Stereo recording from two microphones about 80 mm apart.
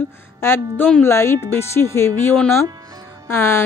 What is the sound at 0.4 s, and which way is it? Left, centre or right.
A woman's voice, left.